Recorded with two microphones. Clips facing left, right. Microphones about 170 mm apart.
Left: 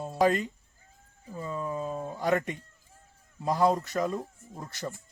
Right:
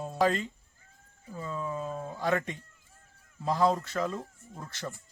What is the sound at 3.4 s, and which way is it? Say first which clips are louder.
Speech: left 1 dB; 15° left (ahead or behind).